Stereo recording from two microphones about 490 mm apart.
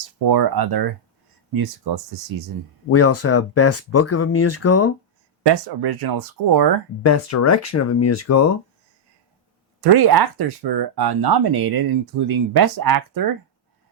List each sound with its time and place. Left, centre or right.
0.2 s speech: right
2.9 s speech: left
5.4 s speech: right
7.0 s speech: left
9.8 s speech: right